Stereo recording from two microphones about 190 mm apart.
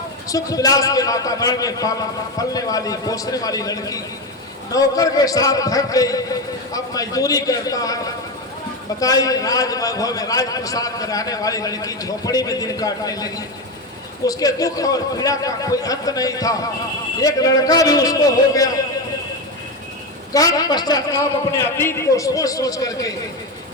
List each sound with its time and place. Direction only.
0.3 s a man's voice: 20° left (ahead or behind)
9.0 s a man's voice: 20° left (ahead or behind)
20.3 s a man's voice: 20° left (ahead or behind)